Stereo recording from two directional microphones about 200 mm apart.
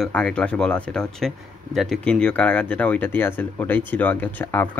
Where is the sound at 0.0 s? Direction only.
5° left (ahead or behind).